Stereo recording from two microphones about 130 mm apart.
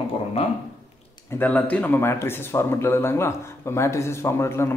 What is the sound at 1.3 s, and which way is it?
Speech, 15° left (ahead or behind).